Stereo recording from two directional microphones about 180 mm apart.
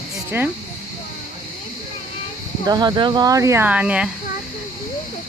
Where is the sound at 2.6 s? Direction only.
25° right (ahead or behind); by 4.1 s 5° right (ahead or behind).